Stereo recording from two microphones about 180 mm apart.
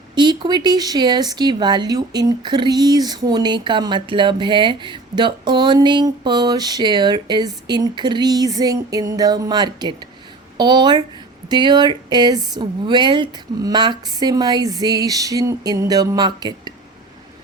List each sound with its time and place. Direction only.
0.1 s speech: 25° right (ahead or behind)